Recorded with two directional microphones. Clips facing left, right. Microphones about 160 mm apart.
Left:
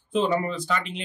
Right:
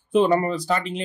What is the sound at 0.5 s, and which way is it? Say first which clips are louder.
Speech: right 4 dB; 40° right (ahead or behind).